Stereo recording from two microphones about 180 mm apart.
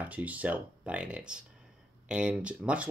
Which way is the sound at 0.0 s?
10° right (ahead or behind).